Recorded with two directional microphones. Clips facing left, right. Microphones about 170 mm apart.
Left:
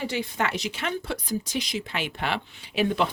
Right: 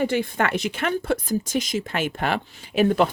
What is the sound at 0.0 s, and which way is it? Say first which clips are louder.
Speech: right 6 dB; 55° right (ahead or behind).